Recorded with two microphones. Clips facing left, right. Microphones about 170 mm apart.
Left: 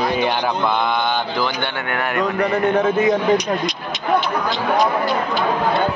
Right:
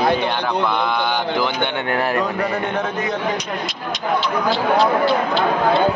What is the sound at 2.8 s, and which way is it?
Speech, 10° left (ahead or behind).